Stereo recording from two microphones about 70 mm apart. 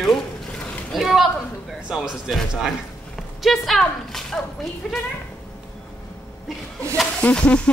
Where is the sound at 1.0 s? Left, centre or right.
Centre.